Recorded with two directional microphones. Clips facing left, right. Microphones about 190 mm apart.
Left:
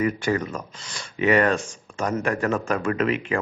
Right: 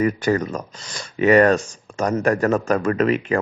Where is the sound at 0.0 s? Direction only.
40° right (ahead or behind).